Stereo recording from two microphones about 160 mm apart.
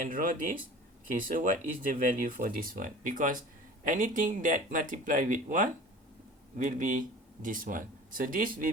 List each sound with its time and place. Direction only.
0.0 s speech: 60° right (ahead or behind)